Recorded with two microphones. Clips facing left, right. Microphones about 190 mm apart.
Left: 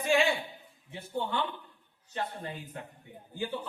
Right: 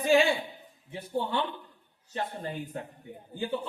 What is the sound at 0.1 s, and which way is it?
A man's voice, 35° right (ahead or behind).